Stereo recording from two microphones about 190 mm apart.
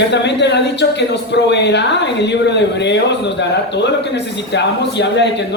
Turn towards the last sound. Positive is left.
turn(degrees=65)  # may be behind; listen again after turning